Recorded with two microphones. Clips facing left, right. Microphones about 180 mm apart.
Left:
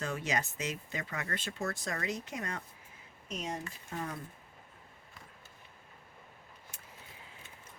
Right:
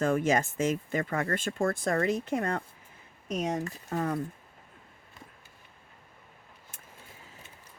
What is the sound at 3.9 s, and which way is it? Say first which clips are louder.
Speech: right 9 dB; 75° right (ahead or behind).